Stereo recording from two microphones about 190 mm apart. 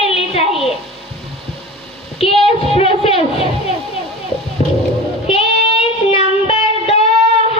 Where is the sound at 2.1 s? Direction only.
30° left (ahead or behind).